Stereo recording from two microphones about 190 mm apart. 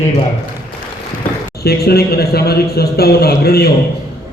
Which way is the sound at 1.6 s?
55° left (ahead or behind).